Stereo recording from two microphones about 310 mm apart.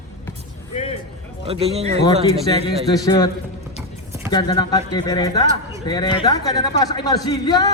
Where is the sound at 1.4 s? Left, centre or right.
Centre.